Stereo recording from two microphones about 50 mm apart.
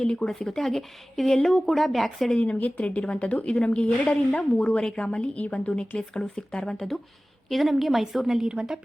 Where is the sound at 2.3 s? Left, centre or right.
Left.